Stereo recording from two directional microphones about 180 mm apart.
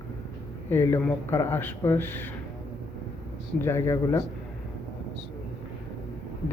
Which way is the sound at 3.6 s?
15° left (ahead or behind).